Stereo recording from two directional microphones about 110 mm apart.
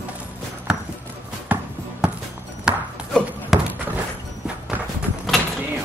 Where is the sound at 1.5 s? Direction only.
15° right (ahead or behind).